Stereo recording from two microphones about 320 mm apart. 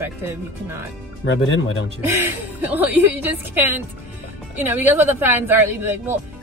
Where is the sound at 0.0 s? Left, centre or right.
Centre.